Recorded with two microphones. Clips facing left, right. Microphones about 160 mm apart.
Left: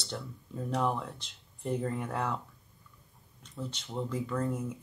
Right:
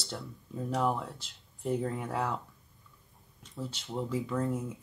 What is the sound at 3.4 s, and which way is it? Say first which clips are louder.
Speech: even; 5° right (ahead or behind).